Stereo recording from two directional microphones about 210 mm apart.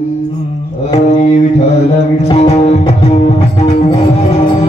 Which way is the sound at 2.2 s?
30° left (ahead or behind).